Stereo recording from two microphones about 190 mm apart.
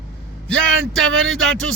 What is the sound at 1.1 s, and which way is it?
Speech, 90° right.